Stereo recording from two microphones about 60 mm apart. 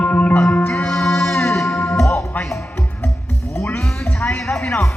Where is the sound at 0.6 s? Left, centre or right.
Centre.